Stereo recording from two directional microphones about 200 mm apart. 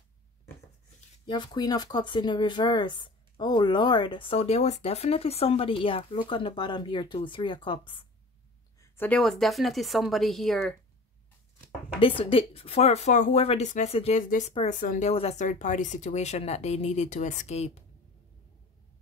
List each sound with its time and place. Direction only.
1.2 s speech: 20° left (ahead or behind)
8.8 s a woman's voice: 10° left (ahead or behind)
12.0 s speech: 25° left (ahead or behind)